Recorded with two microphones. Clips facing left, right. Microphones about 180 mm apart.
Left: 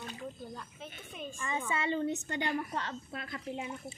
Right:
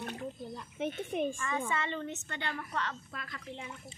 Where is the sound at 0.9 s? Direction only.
55° right (ahead or behind).